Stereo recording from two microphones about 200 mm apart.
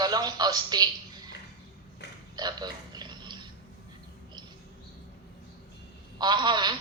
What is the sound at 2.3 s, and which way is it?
Burping, 20° right (ahead or behind).